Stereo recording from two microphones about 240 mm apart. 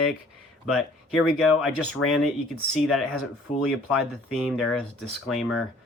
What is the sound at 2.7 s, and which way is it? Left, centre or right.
Speech, centre.